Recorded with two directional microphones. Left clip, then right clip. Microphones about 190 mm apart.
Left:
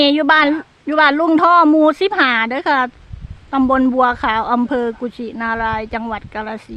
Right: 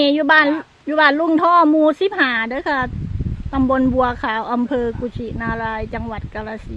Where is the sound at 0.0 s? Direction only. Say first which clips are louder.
Left 1 dB; 15° left (ahead or behind).